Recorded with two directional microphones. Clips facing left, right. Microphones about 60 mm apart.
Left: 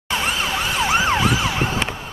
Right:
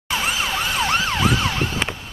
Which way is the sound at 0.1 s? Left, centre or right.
Centre.